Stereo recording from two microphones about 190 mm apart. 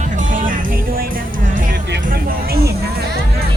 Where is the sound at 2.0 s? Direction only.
55° right (ahead or behind).